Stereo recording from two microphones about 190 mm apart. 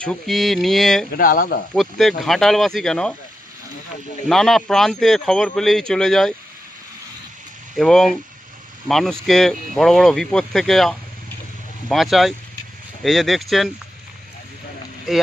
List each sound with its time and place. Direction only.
0.0 s speech: 5° left (ahead or behind)
1.1 s speech: 50° left (ahead or behind)
1.7 s speech: centre (ahead or behind)
4.3 s speech: centre (ahead or behind)
7.8 s speech: centre (ahead or behind)
15.1 s speech: centre (ahead or behind)